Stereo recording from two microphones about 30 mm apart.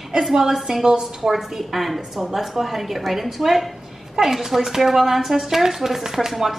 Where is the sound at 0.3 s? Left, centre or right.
Centre.